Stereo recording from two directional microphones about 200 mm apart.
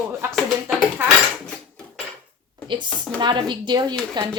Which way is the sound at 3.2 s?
25° right (ahead or behind).